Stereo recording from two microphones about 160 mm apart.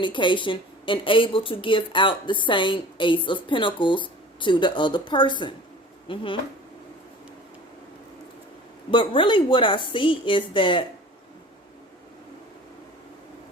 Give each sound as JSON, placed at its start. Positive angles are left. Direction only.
{"t": 0.0, "sound": "speech", "side_deg": 30}
{"t": 8.9, "sound": "speech", "side_deg": 30}